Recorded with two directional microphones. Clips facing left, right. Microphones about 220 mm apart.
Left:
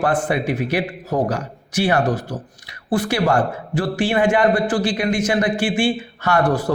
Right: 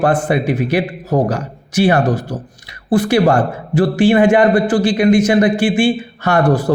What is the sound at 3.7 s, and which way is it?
A man's voice, 20° right (ahead or behind).